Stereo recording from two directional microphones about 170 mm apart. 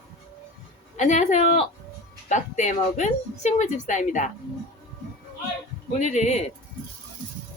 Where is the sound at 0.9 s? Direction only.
45° left (ahead or behind).